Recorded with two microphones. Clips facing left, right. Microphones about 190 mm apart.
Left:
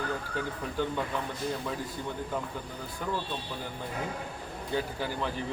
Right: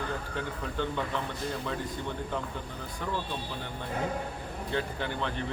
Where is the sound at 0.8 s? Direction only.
10° left (ahead or behind).